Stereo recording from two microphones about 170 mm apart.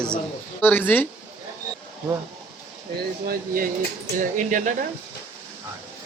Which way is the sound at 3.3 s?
55° right (ahead or behind).